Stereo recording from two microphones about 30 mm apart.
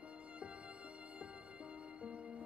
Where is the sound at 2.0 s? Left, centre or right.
Right.